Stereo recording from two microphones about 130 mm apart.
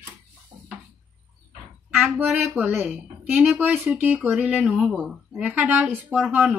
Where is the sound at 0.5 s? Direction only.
45° right (ahead or behind).